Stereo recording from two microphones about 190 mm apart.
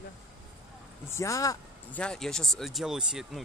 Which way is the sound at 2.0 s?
5° left (ahead or behind).